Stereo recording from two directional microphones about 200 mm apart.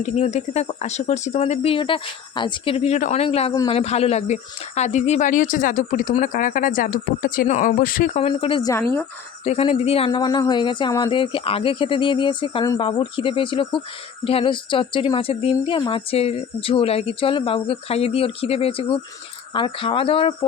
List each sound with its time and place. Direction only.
0.0 s speech: 35° left (ahead or behind)